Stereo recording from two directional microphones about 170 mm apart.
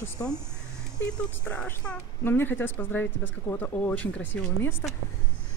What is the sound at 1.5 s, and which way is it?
A woman's voice, 10° left (ahead or behind).